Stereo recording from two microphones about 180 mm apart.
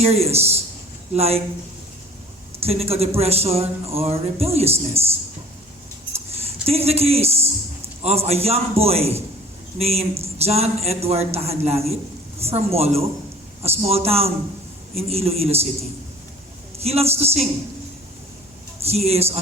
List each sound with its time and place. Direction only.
0.0 s speech: 35° right (ahead or behind)
2.6 s speech: 35° right (ahead or behind)
6.4 s speech: 35° right (ahead or behind)
16.7 s speech: 35° right (ahead or behind)
18.8 s speech: 35° right (ahead or behind)